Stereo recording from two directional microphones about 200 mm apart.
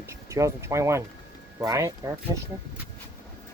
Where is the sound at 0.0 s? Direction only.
15° right (ahead or behind).